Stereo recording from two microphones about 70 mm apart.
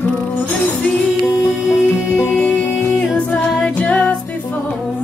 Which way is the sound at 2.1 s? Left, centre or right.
Left.